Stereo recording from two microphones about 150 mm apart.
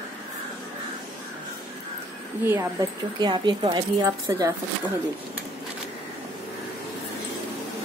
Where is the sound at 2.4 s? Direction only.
20° right (ahead or behind).